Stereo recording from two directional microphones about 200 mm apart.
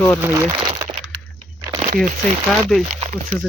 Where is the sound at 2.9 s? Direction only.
35° right (ahead or behind).